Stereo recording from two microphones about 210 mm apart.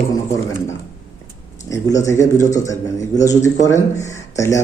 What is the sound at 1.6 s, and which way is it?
Speech, 15° left (ahead or behind).